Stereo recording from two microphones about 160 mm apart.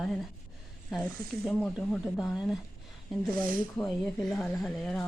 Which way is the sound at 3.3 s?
60° right (ahead or behind).